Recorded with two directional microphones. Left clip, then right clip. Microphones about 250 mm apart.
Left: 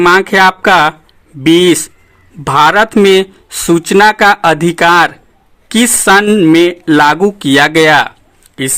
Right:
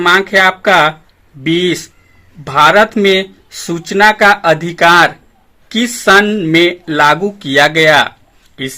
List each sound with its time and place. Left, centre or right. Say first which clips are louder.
0.0 s speech: left 2 dB; left